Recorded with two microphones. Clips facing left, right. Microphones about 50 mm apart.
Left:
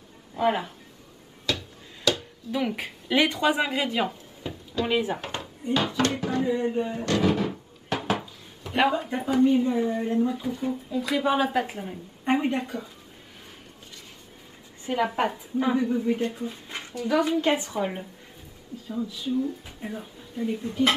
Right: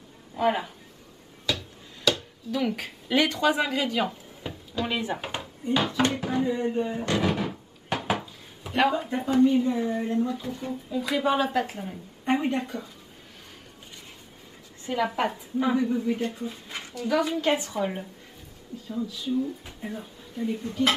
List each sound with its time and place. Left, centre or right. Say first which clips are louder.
0.4 s speech: even; centre
2.5 s a woman's voice: even; centre
4.4 s a sound: left 2 dB; centre
4.8 s speech: left 4 dB; centre
6.4 s speech: left 1 dB; centre
7.1 s drawer open or close: left 2 dB; centre
8.7 s a woman's voice: even; centre
14.9 s a woman's voice: left 1 dB; centre